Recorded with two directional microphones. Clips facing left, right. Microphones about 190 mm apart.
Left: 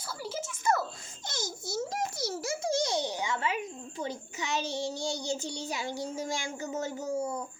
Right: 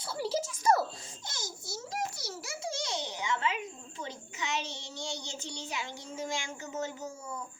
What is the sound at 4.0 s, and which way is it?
Child singing, 35° left (ahead or behind).